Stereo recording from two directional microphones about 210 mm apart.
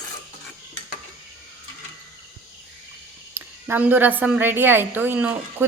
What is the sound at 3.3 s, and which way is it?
A woman's voice, 10° right (ahead or behind).